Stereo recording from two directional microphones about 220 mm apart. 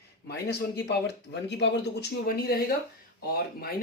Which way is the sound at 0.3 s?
50° left (ahead or behind).